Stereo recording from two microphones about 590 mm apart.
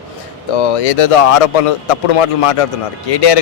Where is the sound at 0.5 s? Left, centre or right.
Left.